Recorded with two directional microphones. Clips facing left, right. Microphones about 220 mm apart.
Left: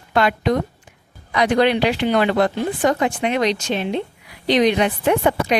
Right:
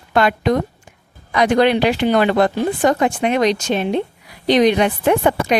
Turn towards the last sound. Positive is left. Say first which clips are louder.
# right 2 dB
turn(degrees=-50)  # may be behind; listen again after turning